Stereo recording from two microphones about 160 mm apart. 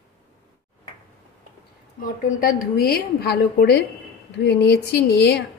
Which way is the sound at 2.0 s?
70° left (ahead or behind).